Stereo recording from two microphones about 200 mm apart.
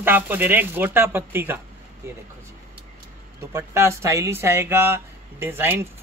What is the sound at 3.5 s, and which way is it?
Speech, 15° right (ahead or behind).